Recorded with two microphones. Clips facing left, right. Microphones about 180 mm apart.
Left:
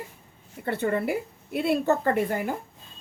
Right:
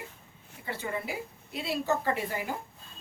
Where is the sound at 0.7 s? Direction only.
60° left (ahead or behind).